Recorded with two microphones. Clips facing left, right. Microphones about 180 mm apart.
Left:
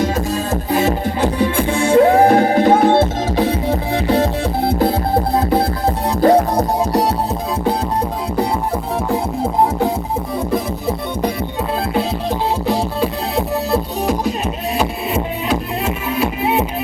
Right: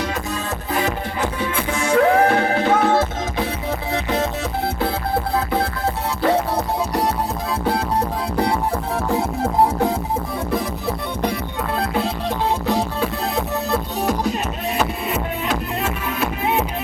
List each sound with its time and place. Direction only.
0.0 s music: 40° left (ahead or behind)
9.0 s music: 10° left (ahead or behind)